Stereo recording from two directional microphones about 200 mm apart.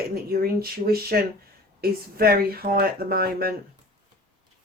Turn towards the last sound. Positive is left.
turn(degrees=-50)  # may be behind; listen again after turning